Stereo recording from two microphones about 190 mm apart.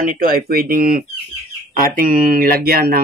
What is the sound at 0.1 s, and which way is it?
Speech, 50° right (ahead or behind).